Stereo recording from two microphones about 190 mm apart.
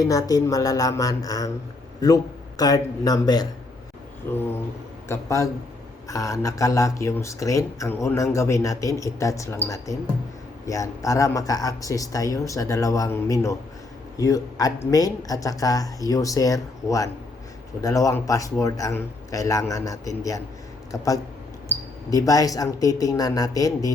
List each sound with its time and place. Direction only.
0.0 s speech: 20° left (ahead or behind)
5.0 s speech: 15° left (ahead or behind)